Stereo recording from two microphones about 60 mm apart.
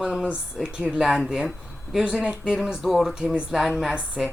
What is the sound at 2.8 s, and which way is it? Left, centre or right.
Speech, centre.